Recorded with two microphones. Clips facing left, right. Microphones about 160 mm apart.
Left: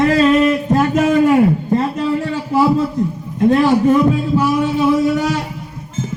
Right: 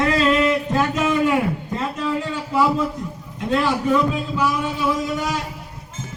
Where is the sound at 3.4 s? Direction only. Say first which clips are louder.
Left 9 dB; 45° left (ahead or behind).